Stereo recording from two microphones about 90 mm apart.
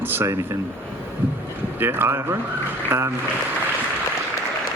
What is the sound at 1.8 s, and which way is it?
A man's voice, 25° right (ahead or behind).